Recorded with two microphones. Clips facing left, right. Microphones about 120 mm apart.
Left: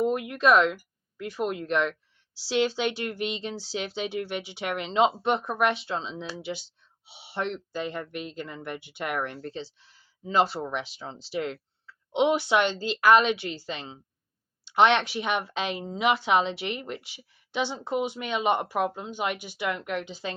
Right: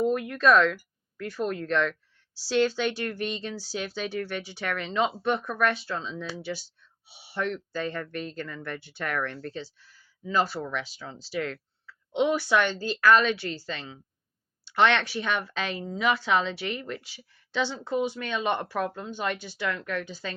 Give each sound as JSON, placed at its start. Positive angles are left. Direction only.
{"t": 0.0, "sound": "speech", "side_deg": 20}